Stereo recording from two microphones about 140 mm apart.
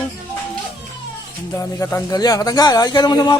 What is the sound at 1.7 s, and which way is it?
Speech, 25° left (ahead or behind).